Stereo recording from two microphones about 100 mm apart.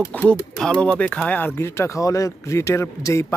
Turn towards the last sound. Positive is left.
turn(degrees=30)  # may be behind; listen again after turning